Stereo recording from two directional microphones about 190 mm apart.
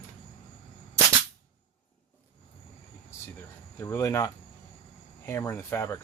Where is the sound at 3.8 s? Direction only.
15° left (ahead or behind).